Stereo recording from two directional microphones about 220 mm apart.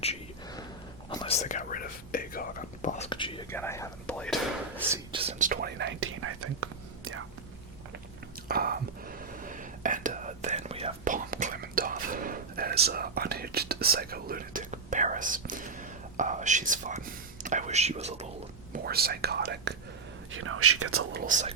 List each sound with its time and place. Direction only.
1.1 s whispering: 25° left (ahead or behind)
3.1 s whispering: 20° left (ahead or behind)
3.5 s whispering: 10° left (ahead or behind)
5.1 s whispering: 30° right (ahead or behind); by 5.9 s 45° right (ahead or behind)
6.0 s whispering: 70° right (ahead or behind)
8.4 s whispering: 45° right (ahead or behind)
18.7 s whispering: 45° right (ahead or behind)
20.3 s whispering: 70° right (ahead or behind); by 21.0 s 90° right
21.1 s speech: 40° right (ahead or behind)